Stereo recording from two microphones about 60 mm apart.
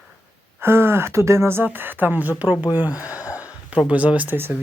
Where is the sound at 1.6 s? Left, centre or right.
Right.